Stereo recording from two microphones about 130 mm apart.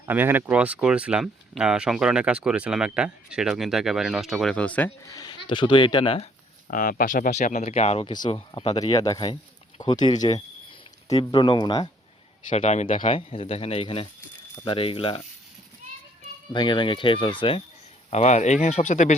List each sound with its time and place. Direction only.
0.0 s speech: 15° right (ahead or behind); by 4.9 s 10° left (ahead or behind)
5.0 s speech: 30° left (ahead or behind)
6.7 s speech: 90° left; by 8.0 s 55° left (ahead or behind)
8.0 s speech: 35° left (ahead or behind)
8.3 s speech: 50° left (ahead or behind)
8.7 s speech: 30° left (ahead or behind)
12.5 s speech: 60° left (ahead or behind)
13.0 s speech: 45° left (ahead or behind)
16.5 s speech: 35° left (ahead or behind)
18.1 s speech: 65° left (ahead or behind)